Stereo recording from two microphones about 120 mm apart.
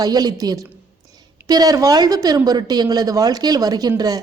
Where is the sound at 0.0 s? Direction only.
35° right (ahead or behind).